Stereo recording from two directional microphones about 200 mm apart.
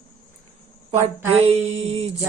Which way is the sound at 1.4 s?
30° right (ahead or behind).